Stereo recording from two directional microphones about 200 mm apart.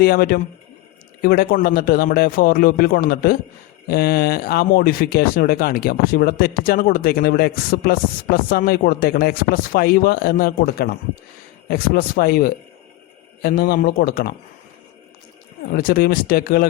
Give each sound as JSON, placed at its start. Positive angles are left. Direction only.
{"t": 0.0, "sound": "speech", "side_deg": 50}
{"t": 15.7, "sound": "speech", "side_deg": 45}